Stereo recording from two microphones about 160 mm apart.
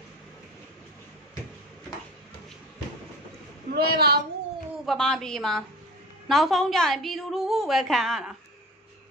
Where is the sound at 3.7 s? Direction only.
75° right (ahead or behind).